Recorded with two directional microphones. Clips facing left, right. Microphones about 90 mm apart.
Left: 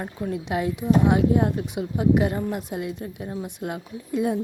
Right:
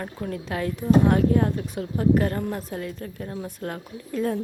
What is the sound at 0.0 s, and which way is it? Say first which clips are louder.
Speech: left 2 dB; 15° left (ahead or behind).